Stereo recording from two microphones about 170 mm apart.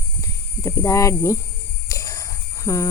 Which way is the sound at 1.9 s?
20° left (ahead or behind).